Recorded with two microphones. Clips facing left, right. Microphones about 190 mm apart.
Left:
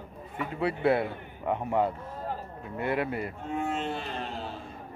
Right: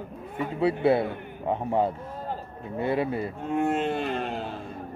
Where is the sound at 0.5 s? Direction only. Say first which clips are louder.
Right 3 dB; 30° right (ahead or behind).